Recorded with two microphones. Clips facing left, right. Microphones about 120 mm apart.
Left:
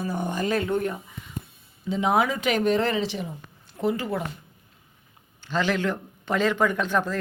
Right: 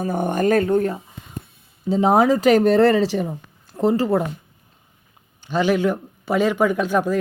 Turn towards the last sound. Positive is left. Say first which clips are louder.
# right 5 dB
turn(degrees=-10)  # may be behind; listen again after turning